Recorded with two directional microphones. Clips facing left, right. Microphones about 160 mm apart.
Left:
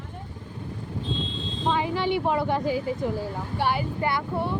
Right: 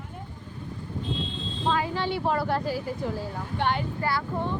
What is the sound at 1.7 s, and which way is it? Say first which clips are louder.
A woman's voice: left 2 dB; 20° left (ahead or behind).